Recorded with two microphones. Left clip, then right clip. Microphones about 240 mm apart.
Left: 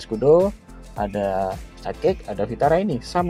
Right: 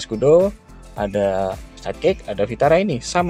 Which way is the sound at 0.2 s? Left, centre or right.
Right.